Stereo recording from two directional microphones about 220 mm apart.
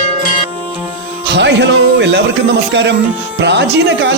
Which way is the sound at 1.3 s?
50° right (ahead or behind).